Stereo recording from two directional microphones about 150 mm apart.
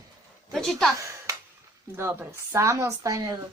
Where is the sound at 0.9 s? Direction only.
20° right (ahead or behind).